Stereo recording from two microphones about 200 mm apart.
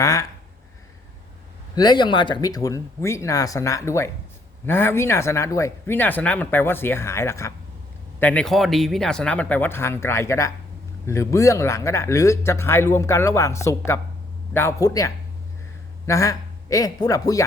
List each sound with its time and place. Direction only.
0.0 s speech: 15° left (ahead or behind)
1.7 s a man's voice: 20° left (ahead or behind)